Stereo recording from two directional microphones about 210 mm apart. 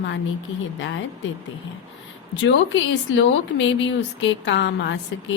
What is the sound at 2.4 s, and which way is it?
A woman's voice, 60° left (ahead or behind).